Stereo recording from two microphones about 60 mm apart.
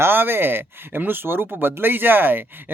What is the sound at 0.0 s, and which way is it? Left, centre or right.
Speech, right.